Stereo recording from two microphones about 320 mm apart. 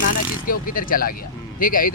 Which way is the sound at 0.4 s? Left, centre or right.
Left.